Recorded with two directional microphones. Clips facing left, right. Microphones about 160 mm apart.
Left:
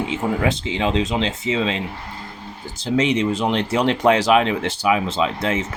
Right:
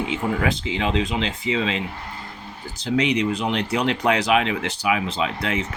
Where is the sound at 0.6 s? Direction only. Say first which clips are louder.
Left 2 dB; 30° left (ahead or behind).